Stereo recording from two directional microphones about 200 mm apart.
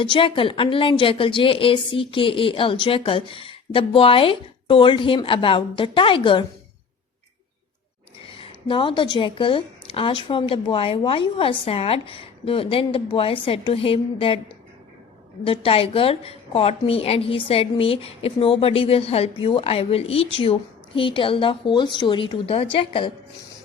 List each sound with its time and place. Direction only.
0.0 s a woman's voice: 25° left (ahead or behind)
8.3 s a woman's voice: 25° left (ahead or behind)